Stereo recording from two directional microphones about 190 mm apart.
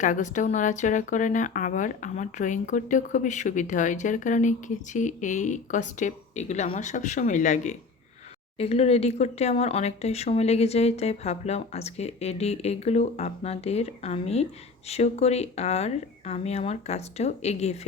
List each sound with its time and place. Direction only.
0.0 s speech: 40° left (ahead or behind)